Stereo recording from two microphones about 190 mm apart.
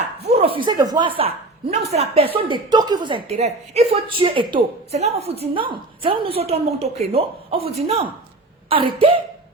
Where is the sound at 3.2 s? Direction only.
35° right (ahead or behind).